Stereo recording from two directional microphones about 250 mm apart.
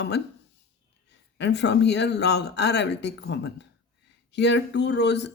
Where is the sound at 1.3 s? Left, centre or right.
Left.